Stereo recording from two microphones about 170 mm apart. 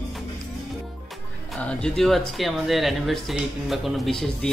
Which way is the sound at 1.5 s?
5° left (ahead or behind).